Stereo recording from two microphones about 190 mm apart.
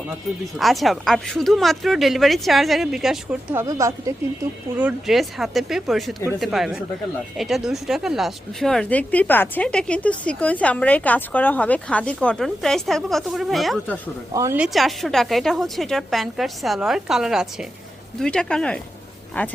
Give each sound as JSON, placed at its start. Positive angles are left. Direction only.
{"t": 0.6, "sound": "speech", "side_deg": 0}
{"t": 3.6, "sound": "speech", "side_deg": -15}
{"t": 4.8, "sound": "speech", "side_deg": -5}
{"t": 14.3, "sound": "speech", "side_deg": -10}